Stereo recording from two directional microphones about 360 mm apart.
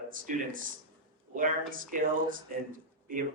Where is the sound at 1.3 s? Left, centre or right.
Right.